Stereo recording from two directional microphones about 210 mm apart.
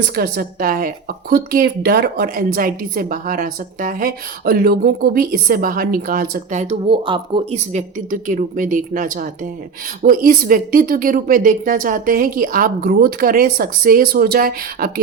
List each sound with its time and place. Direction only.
0.2 s a woman's voice: 45° right (ahead or behind)